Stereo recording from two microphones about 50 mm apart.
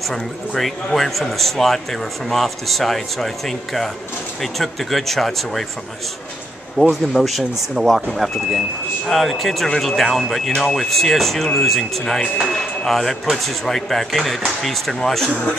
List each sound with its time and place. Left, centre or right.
0.1 s a man's voice: centre
6.8 s a man's voice: centre
12.8 s a man's voice: centre